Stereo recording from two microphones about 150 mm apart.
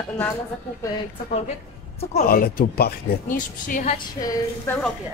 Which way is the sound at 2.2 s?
85° left.